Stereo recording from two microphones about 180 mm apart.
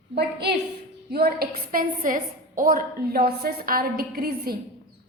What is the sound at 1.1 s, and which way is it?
A woman's voice, 60° right (ahead or behind).